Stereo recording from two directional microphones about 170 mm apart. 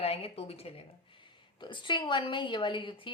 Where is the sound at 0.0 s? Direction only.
35° left (ahead or behind).